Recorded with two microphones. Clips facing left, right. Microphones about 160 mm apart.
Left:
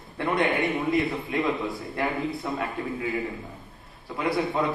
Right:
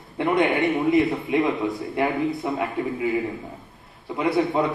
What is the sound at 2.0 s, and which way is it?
Speech, 20° right (ahead or behind).